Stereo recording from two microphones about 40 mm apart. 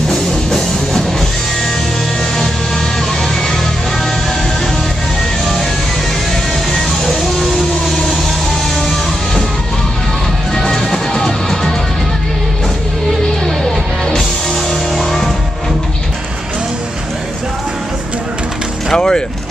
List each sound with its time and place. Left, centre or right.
7.1 s music: centre
10.7 s music: centre
18.9 s vehicle: centre